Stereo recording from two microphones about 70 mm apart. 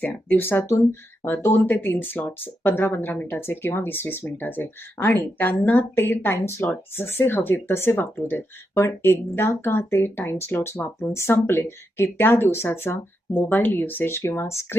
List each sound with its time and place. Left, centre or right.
0.0 s a woman's voice: left